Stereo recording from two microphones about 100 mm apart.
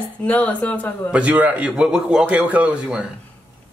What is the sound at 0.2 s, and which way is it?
Speech, 15° left (ahead or behind).